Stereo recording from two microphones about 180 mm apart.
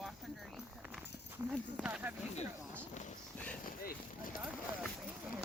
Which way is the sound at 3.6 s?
55° left (ahead or behind).